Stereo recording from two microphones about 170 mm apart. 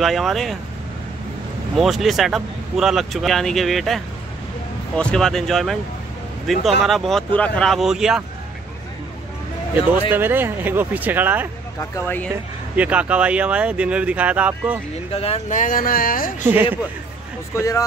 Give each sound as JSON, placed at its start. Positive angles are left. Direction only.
{"t": 0.0, "sound": "speech", "side_deg": 0}
{"t": 1.8, "sound": "speech", "side_deg": 0}
{"t": 10.1, "sound": "speech", "side_deg": -10}
{"t": 11.8, "sound": "speech", "side_deg": 15}
{"t": 12.7, "sound": "speech", "side_deg": -10}
{"t": 15.1, "sound": "speech", "side_deg": 35}
{"t": 17.6, "sound": "speech", "side_deg": 20}